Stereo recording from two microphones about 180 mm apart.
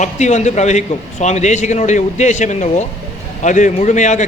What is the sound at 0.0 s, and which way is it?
A man's voice, 40° left (ahead or behind).